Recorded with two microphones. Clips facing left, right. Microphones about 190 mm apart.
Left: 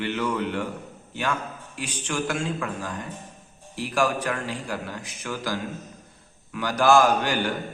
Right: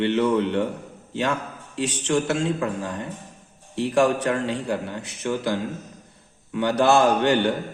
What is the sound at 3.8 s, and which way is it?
Speech, 70° right (ahead or behind).